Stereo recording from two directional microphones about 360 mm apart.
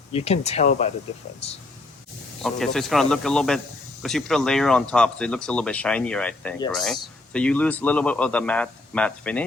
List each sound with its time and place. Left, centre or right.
0.1 s speech: centre
2.4 s speech: centre